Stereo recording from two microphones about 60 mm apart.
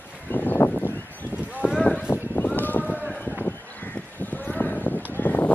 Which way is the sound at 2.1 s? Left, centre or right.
Left.